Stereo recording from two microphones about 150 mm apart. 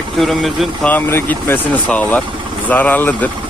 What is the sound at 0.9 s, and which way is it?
Speech, 15° left (ahead or behind).